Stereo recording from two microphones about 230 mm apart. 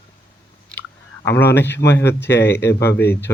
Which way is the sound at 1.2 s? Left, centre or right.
Centre.